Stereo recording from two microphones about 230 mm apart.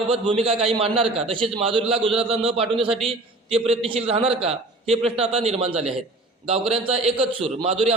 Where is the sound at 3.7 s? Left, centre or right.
Right.